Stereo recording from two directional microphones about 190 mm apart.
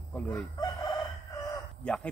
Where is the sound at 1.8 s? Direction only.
5° left (ahead or behind).